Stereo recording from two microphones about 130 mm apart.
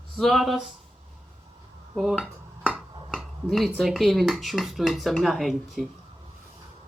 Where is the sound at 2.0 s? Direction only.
Centre (ahead or behind).